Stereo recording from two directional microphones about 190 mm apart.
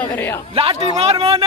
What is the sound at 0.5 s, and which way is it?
Speech, 35° right (ahead or behind).